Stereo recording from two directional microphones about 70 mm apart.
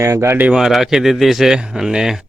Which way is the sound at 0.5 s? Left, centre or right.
Centre.